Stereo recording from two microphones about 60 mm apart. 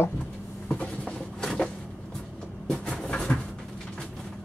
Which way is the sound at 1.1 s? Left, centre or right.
Centre.